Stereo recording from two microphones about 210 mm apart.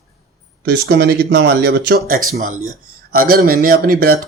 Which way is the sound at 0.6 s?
50° right (ahead or behind).